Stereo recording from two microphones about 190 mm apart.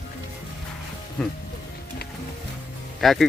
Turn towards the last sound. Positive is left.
turn(degrees=0)  # may be behind; listen again after turning